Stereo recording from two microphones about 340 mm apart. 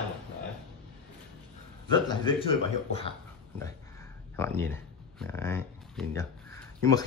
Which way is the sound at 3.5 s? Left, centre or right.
Centre.